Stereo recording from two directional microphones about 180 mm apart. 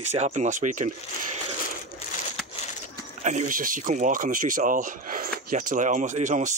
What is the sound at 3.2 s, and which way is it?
Speech, 45° right (ahead or behind).